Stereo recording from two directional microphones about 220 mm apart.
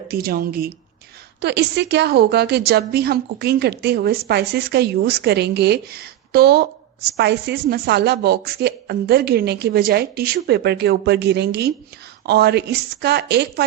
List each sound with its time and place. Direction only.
0.1 s a woman's voice: 40° right (ahead or behind)